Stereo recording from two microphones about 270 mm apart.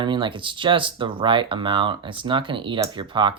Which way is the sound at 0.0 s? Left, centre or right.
Centre.